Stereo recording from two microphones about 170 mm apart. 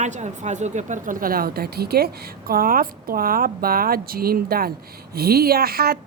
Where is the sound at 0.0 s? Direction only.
45° right (ahead or behind).